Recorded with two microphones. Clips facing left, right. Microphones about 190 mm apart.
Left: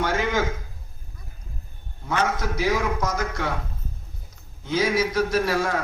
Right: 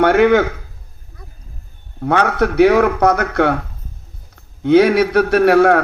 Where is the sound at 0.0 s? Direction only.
65° right (ahead or behind).